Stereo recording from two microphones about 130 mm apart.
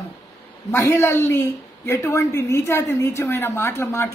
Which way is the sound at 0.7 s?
20° left (ahead or behind).